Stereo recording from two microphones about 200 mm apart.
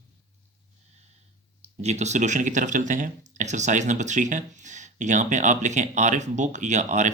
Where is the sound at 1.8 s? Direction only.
35° right (ahead or behind).